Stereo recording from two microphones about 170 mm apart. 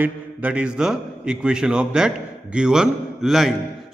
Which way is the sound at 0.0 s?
10° right (ahead or behind).